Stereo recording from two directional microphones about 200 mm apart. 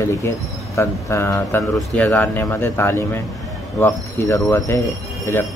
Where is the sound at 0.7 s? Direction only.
15° left (ahead or behind).